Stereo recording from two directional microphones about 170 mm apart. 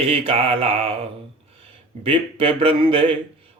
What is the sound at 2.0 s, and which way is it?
Speech, 30° right (ahead or behind).